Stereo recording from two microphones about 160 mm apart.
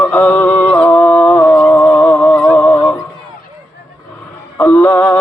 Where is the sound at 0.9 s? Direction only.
10° left (ahead or behind).